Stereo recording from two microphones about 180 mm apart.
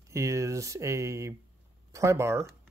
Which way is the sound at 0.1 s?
15° right (ahead or behind).